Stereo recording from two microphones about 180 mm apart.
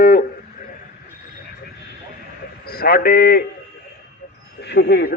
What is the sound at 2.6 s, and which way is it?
Speech, 55° left (ahead or behind).